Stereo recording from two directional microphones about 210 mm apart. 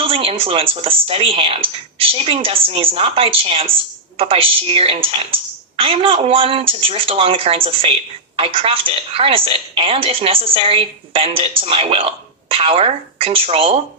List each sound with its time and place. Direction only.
0.0 s a woman's voice: 25° right (ahead or behind)